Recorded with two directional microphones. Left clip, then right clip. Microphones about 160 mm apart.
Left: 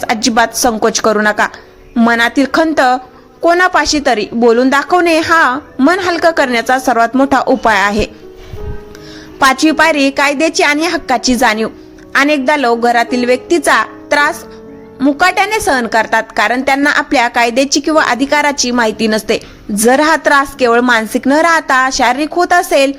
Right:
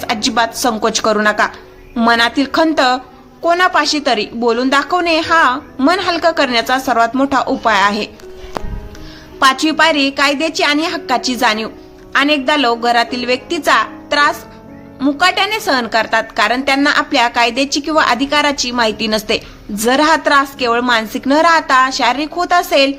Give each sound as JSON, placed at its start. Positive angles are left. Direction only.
{"t": 0.0, "sound": "a woman's voice", "side_deg": 40}
{"t": 9.4, "sound": "a woman's voice", "side_deg": 45}